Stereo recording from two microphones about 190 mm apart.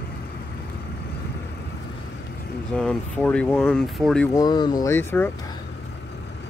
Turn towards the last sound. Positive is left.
turn(degrees=10)  # may be behind; listen again after turning